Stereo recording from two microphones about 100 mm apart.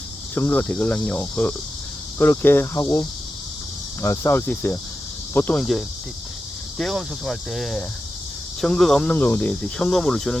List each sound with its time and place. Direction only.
0.3 s speech: 20° left (ahead or behind)
2.1 s cricket: 20° left (ahead or behind)
5.3 s speech: 15° left (ahead or behind)
6.7 s speech: 5° left (ahead or behind)
9.1 s speech: 15° left (ahead or behind)